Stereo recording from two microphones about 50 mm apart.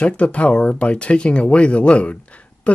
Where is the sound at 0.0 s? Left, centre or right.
Left.